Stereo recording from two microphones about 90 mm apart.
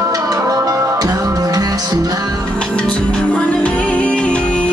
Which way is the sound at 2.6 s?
10° left (ahead or behind).